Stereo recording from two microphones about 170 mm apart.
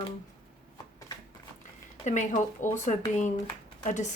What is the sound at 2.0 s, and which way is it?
Speech, 45° left (ahead or behind).